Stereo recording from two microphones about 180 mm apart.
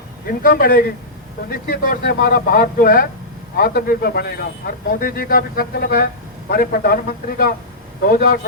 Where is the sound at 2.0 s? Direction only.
55° left (ahead or behind).